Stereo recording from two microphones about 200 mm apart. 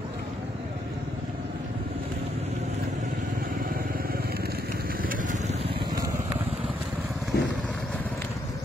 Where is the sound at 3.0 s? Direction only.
45° right (ahead or behind); by 6.3 s 15° right (ahead or behind).